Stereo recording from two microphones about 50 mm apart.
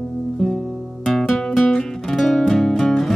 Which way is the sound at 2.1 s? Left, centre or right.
Centre.